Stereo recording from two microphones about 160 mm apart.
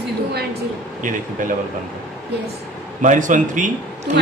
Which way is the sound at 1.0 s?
55° right (ahead or behind).